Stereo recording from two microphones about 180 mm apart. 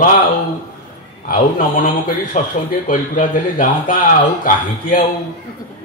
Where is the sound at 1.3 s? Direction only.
50° left (ahead or behind).